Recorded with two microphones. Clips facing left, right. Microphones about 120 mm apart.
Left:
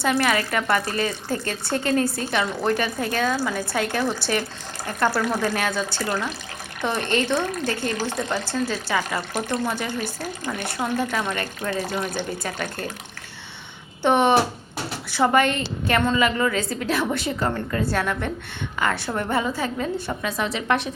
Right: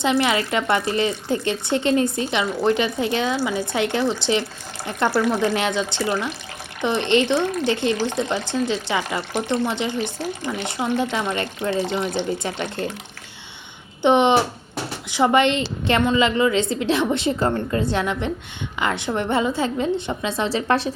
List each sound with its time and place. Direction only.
0.0 s speech: 20° right (ahead or behind)
11.1 s speech: 20° right (ahead or behind)
14.0 s speech: 20° right (ahead or behind)